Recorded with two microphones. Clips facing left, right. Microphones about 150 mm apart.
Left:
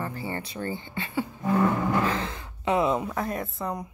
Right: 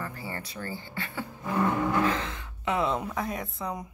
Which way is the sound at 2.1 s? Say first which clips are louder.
Left 2 dB; 35° left (ahead or behind).